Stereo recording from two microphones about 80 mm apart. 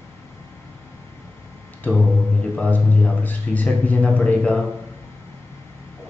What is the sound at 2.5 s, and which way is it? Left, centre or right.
A man's voice, centre.